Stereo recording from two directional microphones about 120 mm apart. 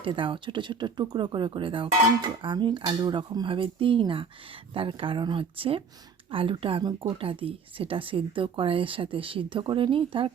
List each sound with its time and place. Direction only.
0.0 s speech: 45° right (ahead or behind)